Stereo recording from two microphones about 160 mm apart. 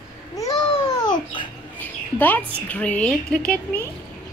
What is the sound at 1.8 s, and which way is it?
Mouse, 10° left (ahead or behind).